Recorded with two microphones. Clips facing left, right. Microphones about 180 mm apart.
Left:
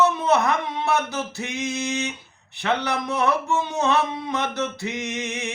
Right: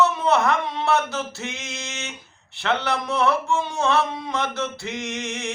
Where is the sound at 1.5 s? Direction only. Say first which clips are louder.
Left 9 dB; 15° left (ahead or behind).